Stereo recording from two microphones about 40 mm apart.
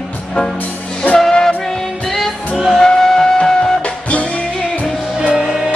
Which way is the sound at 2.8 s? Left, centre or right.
Centre.